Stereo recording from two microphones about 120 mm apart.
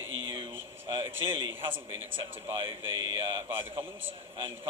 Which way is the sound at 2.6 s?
45° right (ahead or behind).